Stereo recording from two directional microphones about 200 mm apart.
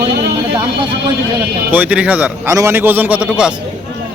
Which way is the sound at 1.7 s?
5° right (ahead or behind).